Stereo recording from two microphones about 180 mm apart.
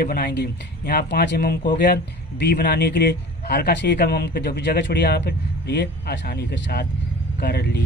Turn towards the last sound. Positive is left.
turn(degrees=65)  # may be behind; listen again after turning